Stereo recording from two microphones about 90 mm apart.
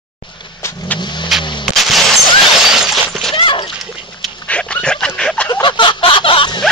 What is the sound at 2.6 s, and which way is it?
Shatter, 5° right (ahead or behind).